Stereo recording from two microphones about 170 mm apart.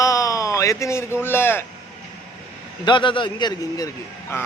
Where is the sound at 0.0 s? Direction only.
20° left (ahead or behind).